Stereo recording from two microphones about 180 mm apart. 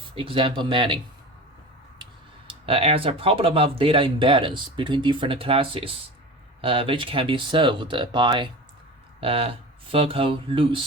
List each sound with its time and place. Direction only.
0.1 s speech: 30° right (ahead or behind)
2.5 s speech: 30° right (ahead or behind)